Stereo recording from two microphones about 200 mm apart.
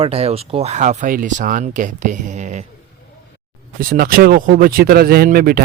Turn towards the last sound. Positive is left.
turn(degrees=-50)  # may be behind; listen again after turning